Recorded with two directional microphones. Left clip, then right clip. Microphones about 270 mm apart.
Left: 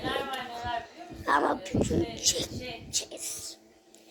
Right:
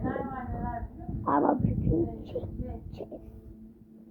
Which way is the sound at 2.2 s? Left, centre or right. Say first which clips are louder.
Left 8 dB; centre.